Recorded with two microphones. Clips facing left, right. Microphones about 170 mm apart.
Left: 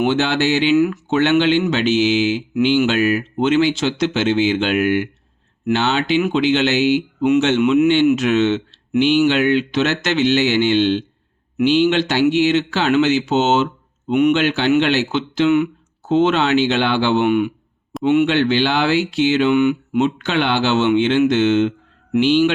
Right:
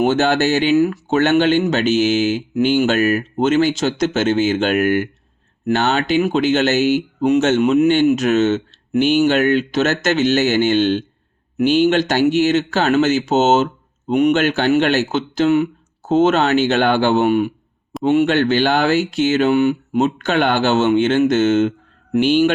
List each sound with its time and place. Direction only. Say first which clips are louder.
0.0 s speech: right 2 dB; 45° right (ahead or behind)